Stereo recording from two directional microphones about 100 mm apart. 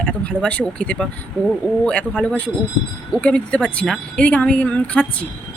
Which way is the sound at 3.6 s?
Centre (ahead or behind).